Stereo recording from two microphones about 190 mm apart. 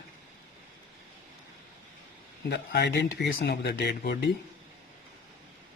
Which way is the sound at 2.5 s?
60° left (ahead or behind).